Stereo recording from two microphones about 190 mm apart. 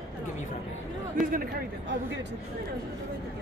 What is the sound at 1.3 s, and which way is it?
Speech, 50° right (ahead or behind).